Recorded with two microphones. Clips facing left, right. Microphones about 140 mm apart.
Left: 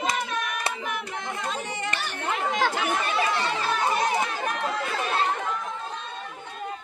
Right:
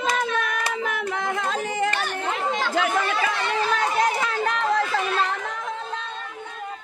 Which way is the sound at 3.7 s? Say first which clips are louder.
Right 2 dB; 90° right.